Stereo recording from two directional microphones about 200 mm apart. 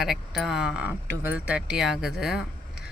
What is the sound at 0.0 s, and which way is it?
Speech, centre (ahead or behind).